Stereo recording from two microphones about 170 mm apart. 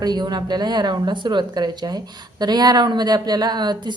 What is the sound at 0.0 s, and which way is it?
A woman's voice, 25° right (ahead or behind).